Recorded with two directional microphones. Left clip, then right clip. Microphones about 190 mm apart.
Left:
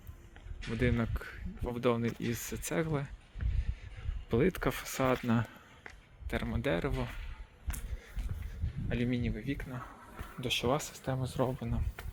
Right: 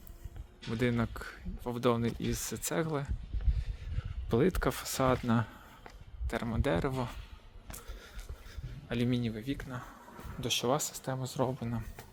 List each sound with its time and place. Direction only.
0.8 s speech: 5° right (ahead or behind)
2.3 s speech: 55° right (ahead or behind)
2.6 s speech: 5° right (ahead or behind)
4.3 s speech: 10° right (ahead or behind)
8.9 s speech: 10° right (ahead or behind)
11.6 s speech: 10° right (ahead or behind)